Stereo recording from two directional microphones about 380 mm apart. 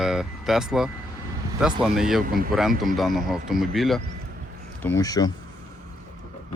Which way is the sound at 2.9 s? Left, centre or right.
Centre.